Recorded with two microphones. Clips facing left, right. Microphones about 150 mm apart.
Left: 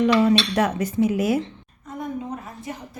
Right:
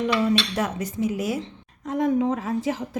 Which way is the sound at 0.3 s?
70° left (ahead or behind).